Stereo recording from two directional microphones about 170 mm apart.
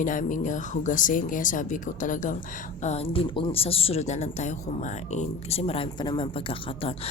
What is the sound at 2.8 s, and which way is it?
Speech, 40° left (ahead or behind).